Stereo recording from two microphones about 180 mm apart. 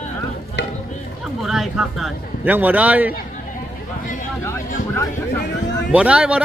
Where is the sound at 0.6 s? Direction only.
75° left (ahead or behind).